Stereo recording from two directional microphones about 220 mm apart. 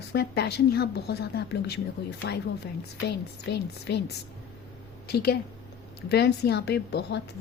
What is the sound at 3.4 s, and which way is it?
A woman's voice, 50° left (ahead or behind).